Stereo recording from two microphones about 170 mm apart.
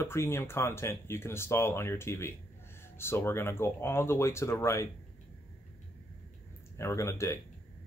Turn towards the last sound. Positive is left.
turn(degrees=15)  # may be behind; listen again after turning